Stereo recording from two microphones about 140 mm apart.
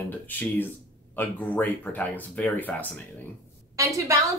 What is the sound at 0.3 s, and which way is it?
Speech, 10° left (ahead or behind).